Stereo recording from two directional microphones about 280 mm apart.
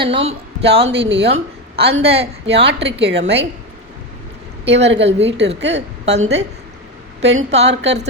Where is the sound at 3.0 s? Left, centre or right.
Right.